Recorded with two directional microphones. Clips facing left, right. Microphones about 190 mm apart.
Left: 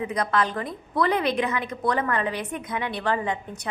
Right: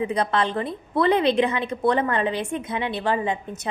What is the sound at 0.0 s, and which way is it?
A woman's voice, 25° right (ahead or behind).